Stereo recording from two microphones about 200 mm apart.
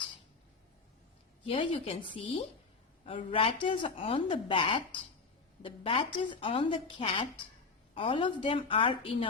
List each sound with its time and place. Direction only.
1.5 s speech: 25° left (ahead or behind)